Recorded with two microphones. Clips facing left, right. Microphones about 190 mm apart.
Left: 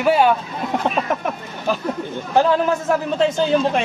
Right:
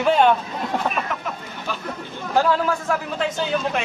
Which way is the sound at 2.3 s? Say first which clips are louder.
Left 3 dB; 20° left (ahead or behind).